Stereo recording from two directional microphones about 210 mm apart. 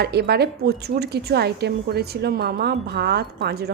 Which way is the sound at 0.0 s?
50° right (ahead or behind).